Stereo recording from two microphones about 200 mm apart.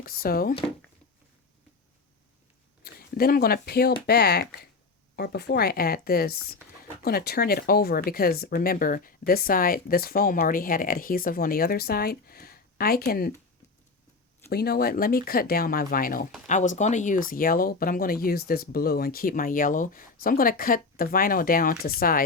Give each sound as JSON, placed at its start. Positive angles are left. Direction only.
{"t": 0.0, "sound": "speech", "side_deg": 45}
{"t": 2.8, "sound": "speech", "side_deg": 50}
{"t": 14.5, "sound": "speech", "side_deg": 50}